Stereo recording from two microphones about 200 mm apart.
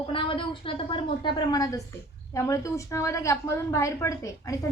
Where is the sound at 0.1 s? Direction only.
25° left (ahead or behind).